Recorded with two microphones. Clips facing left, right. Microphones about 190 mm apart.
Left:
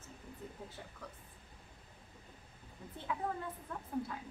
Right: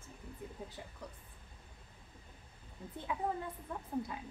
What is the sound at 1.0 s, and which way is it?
Speech, 15° right (ahead or behind).